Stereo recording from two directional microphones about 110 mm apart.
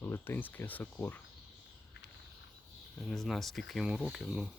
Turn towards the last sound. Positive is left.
turn(degrees=0)  # may be behind; listen again after turning